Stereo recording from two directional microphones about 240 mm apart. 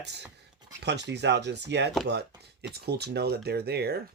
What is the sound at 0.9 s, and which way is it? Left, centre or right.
Speech, right.